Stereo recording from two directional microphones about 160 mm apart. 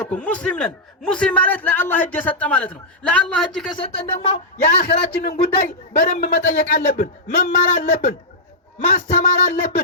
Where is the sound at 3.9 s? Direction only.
35° left (ahead or behind).